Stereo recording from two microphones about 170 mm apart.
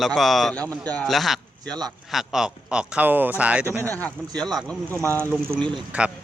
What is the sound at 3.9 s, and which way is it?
Speech, 10° left (ahead or behind).